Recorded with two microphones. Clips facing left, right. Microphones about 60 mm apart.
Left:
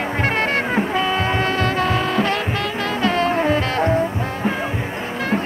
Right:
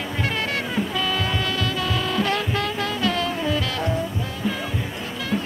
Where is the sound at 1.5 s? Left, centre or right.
Left.